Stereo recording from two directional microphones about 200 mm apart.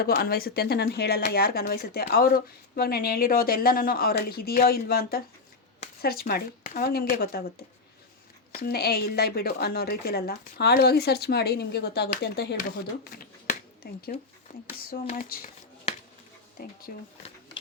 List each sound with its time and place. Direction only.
0.0 s speech: 50° left (ahead or behind)
8.5 s speech: 50° left (ahead or behind)
16.6 s speech: 50° left (ahead or behind)